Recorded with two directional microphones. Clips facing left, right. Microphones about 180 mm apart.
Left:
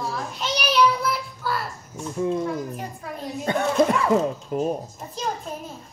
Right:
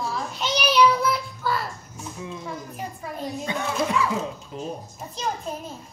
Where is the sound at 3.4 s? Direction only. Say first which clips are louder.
Left 8 dB; 50° left (ahead or behind).